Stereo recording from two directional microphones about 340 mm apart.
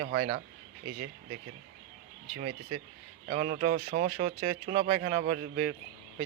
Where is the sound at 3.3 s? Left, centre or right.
Centre.